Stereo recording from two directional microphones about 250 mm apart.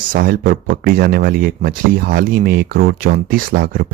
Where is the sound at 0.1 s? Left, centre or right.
Right.